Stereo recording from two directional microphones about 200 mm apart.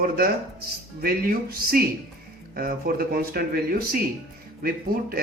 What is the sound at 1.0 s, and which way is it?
Speech, 45° right (ahead or behind).